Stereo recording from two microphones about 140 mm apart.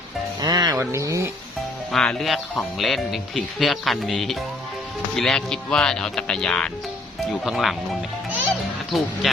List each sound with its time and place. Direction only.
0.4 s music: 30° right (ahead or behind)
0.8 s speech: 20° right (ahead or behind)
1.9 s speech: 5° left (ahead or behind)
8.9 s speech: centre (ahead or behind)